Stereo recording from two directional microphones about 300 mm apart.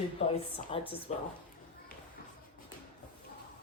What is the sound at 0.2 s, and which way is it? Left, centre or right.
Speech, centre.